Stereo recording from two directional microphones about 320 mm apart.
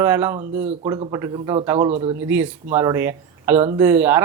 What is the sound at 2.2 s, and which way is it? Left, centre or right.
Speech, centre.